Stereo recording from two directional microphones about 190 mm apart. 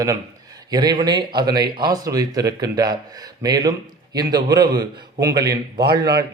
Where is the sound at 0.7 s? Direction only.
20° right (ahead or behind).